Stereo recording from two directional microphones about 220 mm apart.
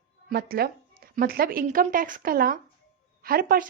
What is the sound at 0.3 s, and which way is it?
A woman's voice, 45° right (ahead or behind).